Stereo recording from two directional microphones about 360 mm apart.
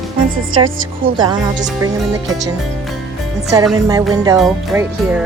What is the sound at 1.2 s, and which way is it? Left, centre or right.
Speech, centre.